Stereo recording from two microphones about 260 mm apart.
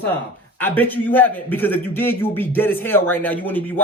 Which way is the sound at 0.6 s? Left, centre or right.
Centre.